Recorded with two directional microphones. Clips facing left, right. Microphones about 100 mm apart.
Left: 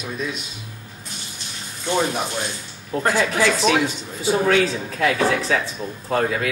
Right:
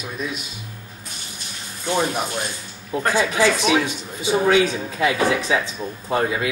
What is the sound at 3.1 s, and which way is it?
Speech, 15° right (ahead or behind).